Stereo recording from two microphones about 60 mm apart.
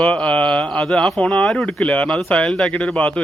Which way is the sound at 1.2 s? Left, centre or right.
Left.